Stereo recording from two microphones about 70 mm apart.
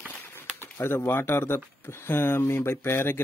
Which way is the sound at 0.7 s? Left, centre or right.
Left.